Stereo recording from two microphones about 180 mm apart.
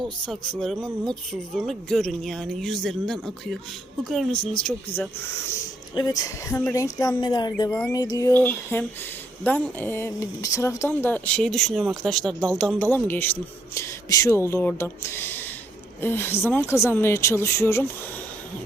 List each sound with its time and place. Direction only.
0.0 s speech: centre (ahead or behind)
5.9 s speech: 20° left (ahead or behind); by 12.3 s centre (ahead or behind)
12.3 s speech: 20° right (ahead or behind)
12.5 s speech: 5° left (ahead or behind)